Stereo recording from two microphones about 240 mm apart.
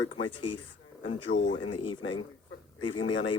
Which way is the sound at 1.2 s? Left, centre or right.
Left.